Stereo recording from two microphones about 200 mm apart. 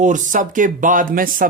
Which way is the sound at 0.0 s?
40° right (ahead or behind).